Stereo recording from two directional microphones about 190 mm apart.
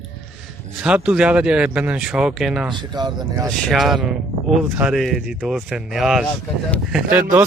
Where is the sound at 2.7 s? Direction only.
20° right (ahead or behind).